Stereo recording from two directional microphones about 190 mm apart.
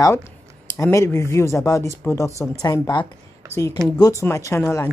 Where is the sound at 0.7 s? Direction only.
15° left (ahead or behind).